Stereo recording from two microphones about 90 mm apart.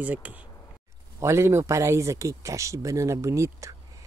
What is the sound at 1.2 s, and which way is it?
Speech, 30° right (ahead or behind).